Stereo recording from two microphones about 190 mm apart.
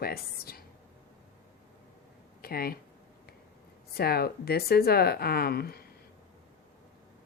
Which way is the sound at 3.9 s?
55° left (ahead or behind).